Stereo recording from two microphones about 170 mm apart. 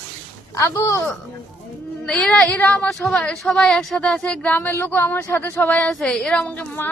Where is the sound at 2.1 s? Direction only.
5° left (ahead or behind).